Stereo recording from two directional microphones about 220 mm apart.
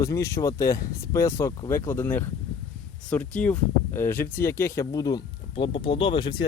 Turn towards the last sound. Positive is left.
turn(degrees=20)  # may be behind; listen again after turning